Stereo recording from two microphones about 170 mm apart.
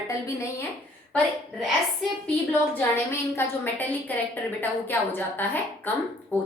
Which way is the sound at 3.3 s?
10° left (ahead or behind).